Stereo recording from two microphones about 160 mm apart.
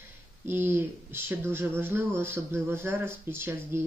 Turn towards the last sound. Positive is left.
turn(degrees=-15)  # may be behind; listen again after turning